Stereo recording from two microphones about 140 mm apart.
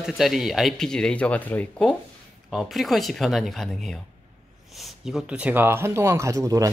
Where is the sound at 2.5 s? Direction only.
Centre (ahead or behind); by 6.7 s 25° right (ahead or behind).